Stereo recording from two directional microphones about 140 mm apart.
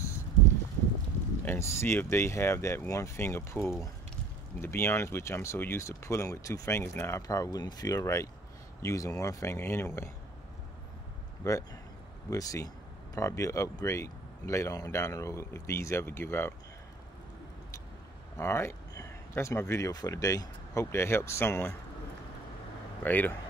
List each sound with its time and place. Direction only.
1.4 s speech: 15° left (ahead or behind)
11.4 s speech: 25° left (ahead or behind)
18.3 s speech: 20° left (ahead or behind)
23.0 s speech: 15° left (ahead or behind)